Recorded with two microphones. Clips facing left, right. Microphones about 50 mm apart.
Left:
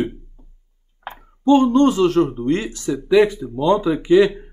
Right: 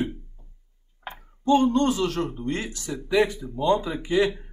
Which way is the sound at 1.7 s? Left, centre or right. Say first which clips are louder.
Left 8 dB; left.